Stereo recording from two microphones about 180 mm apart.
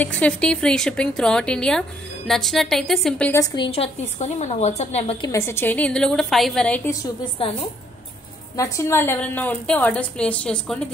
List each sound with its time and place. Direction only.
0.2 s speech: 5° left (ahead or behind)
3.3 s a woman's voice: 20° left (ahead or behind)
5.3 s a woman's voice: 15° left (ahead or behind)
8.5 s a woman's voice: 15° left (ahead or behind)